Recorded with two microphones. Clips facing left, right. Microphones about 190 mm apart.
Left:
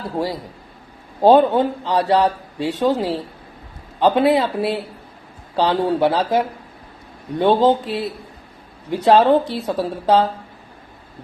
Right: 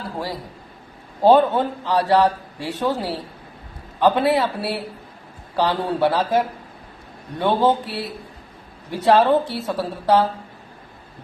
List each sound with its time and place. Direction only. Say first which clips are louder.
1.2 s a man's voice: left 2 dB; 20° left (ahead or behind)